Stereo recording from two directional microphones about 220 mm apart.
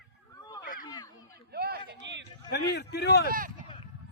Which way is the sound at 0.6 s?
40° left (ahead or behind).